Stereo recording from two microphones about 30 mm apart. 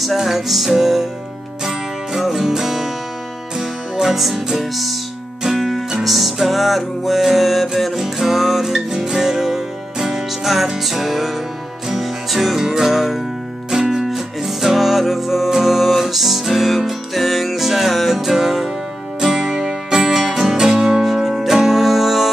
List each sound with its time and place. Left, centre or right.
0.0 s music: centre
10.4 s music: centre
12.5 s music: centre